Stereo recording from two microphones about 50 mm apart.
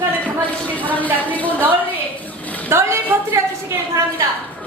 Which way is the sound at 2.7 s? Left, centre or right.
Right.